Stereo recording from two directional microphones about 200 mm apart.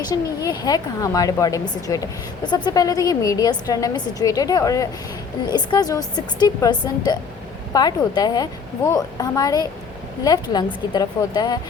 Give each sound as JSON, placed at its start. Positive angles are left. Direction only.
{"t": 0.4, "sound": "a woman's voice", "side_deg": 20}